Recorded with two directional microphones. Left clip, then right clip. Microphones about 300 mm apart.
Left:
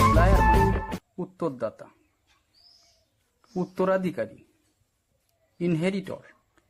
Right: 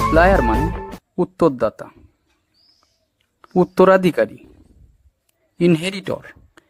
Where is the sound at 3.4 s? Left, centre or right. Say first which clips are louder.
Right 13 dB; right.